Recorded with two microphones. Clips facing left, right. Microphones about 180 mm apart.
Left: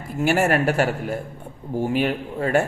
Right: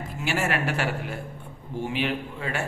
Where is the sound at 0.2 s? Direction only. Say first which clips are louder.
Left 8 dB; 45° left (ahead or behind).